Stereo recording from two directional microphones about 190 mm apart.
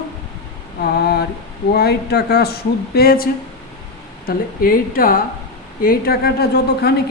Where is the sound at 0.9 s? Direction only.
55° left (ahead or behind).